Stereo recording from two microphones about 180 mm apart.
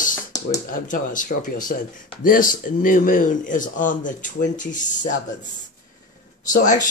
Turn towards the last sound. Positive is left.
turn(degrees=45)  # may be behind; listen again after turning